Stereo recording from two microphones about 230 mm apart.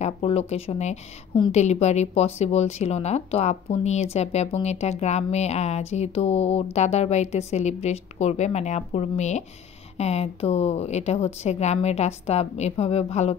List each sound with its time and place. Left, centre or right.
0.0 s a woman's voice: left